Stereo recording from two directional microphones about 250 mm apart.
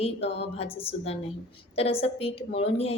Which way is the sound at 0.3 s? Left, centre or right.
Left.